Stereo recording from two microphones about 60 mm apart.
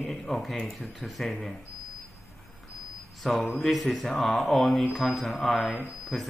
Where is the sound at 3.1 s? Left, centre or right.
Centre.